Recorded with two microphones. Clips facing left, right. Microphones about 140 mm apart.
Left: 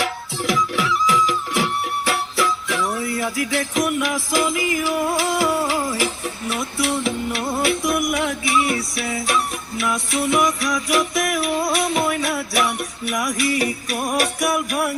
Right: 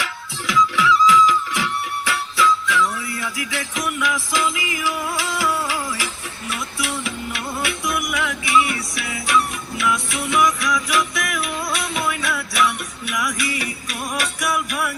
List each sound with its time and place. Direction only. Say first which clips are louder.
0.4 s music: right 3 dB; 50° left (ahead or behind)
11.8 s jingle bell: left 4 dB; 45° left (ahead or behind)